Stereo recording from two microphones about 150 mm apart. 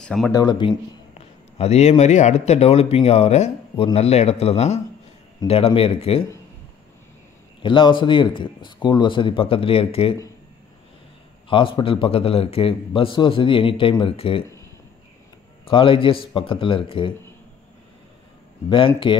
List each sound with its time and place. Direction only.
0.0 s speech: centre (ahead or behind)
0.3 s speech: 25° left (ahead or behind)
1.1 s a man's voice: 45° left (ahead or behind)
7.6 s a man's voice: 35° left (ahead or behind)
11.4 s a man's voice: 35° left (ahead or behind)
15.6 s a man's voice: 35° left (ahead or behind)
18.7 s a man's voice: 35° left (ahead or behind)